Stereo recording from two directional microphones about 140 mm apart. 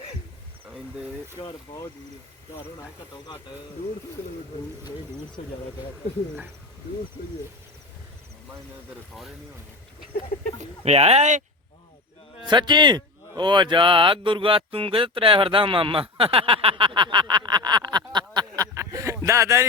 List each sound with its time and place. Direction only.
10.8 s speech: 50° right (ahead or behind)
12.5 s speech: 30° right (ahead or behind)